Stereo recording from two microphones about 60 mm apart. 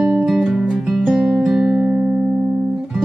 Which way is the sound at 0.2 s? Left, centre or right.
Centre.